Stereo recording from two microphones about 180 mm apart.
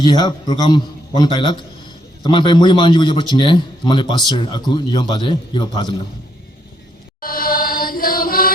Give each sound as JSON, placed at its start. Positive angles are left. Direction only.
{"t": 0.0, "sound": "a man's voice", "side_deg": 25}
{"t": 7.2, "sound": "chant", "side_deg": 50}